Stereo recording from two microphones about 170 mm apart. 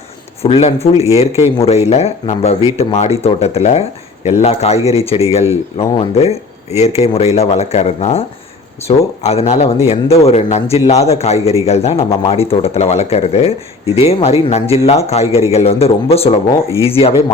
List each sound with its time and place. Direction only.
0.4 s speech: 40° left (ahead or behind)